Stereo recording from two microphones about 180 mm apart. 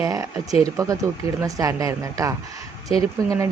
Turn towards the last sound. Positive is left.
turn(degrees=-15)  # may be behind; listen again after turning